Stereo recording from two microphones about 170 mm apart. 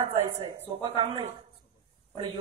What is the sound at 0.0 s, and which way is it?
A woman's voice, 35° right (ahead or behind).